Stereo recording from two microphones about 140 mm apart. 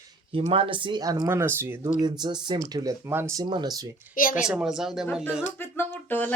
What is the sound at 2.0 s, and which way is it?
Speech, 30° right (ahead or behind).